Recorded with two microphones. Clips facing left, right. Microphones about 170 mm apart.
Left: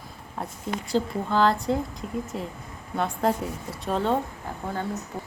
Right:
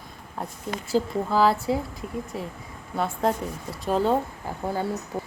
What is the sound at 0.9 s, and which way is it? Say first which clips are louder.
Speech: right 2 dB; 5° right (ahead or behind).